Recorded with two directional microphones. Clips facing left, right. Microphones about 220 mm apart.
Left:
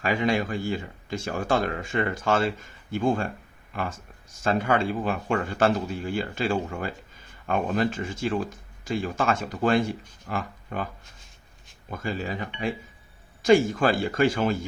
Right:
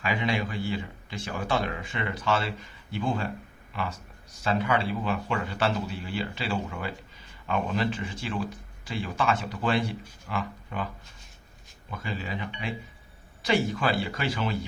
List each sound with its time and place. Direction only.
0.0 s speech: 45° left (ahead or behind)
11.9 s speech: 45° left (ahead or behind)